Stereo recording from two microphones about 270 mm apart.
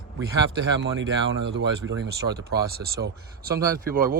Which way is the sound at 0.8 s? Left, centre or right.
Right.